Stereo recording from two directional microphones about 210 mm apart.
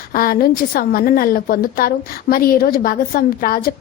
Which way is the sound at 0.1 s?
45° left (ahead or behind).